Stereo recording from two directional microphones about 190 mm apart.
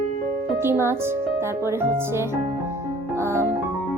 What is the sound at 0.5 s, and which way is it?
Music, 10° right (ahead or behind).